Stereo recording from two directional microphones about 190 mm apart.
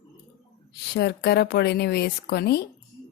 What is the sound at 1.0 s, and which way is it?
Speech, 60° left (ahead or behind).